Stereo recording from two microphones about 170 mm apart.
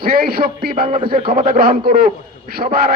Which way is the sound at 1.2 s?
30° right (ahead or behind).